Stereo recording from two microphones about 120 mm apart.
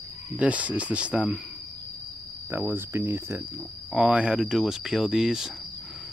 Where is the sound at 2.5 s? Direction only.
20° right (ahead or behind).